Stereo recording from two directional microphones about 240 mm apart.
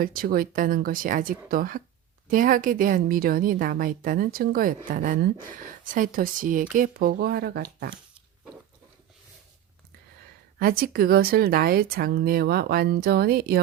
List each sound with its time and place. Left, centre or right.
0.0 s speech: right
10.6 s speech: right